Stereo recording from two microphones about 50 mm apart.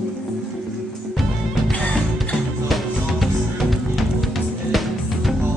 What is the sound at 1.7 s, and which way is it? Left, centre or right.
Music, left.